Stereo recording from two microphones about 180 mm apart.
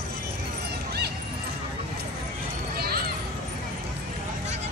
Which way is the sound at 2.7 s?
60° right (ahead or behind).